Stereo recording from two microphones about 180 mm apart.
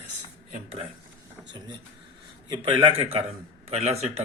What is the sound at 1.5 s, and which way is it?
A man's voice, 25° right (ahead or behind).